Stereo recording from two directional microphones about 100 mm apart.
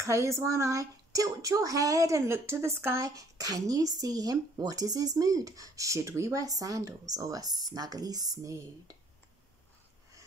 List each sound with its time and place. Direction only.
0.0 s speech: 30° right (ahead or behind)